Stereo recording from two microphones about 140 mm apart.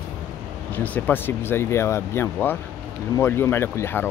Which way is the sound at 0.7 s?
10° left (ahead or behind).